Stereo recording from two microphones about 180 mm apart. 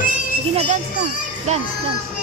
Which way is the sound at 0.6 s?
40° right (ahead or behind).